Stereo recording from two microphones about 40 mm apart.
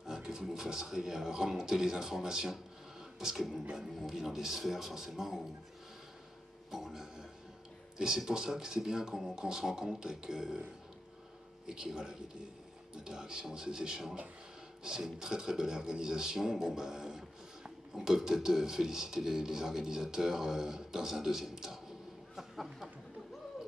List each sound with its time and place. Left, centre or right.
0.0 s speech: centre
6.7 s speech: centre
8.3 s speech: centre
11.6 s speech: centre